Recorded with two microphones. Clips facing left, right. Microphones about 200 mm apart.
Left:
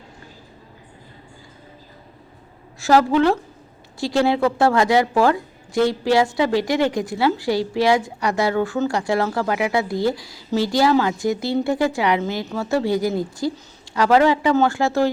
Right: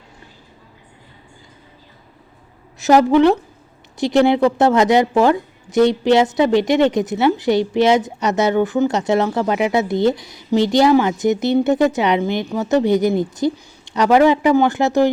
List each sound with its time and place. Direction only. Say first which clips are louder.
2.7 s a woman's voice: right 4 dB; 20° right (ahead or behind)